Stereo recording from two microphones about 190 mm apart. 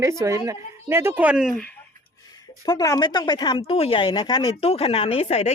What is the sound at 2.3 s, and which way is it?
Speech, 20° left (ahead or behind).